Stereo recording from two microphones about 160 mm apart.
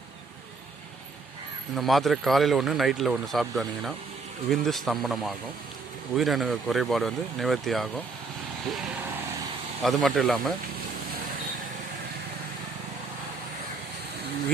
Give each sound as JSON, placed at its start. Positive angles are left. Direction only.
{"t": 1.7, "sound": "speech", "side_deg": 0}